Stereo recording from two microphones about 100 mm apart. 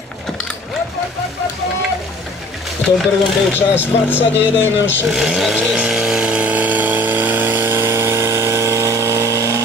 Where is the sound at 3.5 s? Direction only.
20° left (ahead or behind).